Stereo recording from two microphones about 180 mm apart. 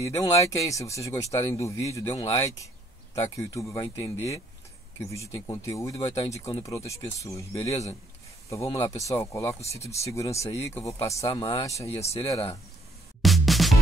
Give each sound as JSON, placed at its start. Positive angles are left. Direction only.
{"t": 0.0, "sound": "speech", "side_deg": 20}
{"t": 5.5, "sound": "speech", "side_deg": 20}
{"t": 13.2, "sound": "music", "side_deg": 0}